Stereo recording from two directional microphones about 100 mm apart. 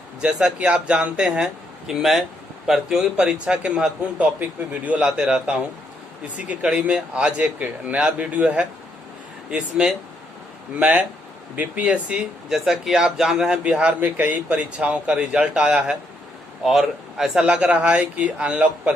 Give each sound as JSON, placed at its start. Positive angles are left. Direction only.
{"t": 0.2, "sound": "speech", "side_deg": -10}